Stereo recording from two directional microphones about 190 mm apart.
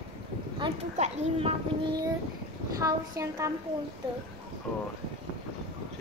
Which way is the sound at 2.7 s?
15° right (ahead or behind).